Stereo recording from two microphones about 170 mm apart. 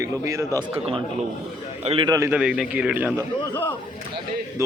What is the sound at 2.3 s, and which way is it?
Speech, 5° right (ahead or behind).